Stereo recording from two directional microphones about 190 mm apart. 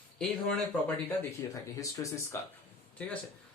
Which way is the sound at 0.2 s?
5° left (ahead or behind).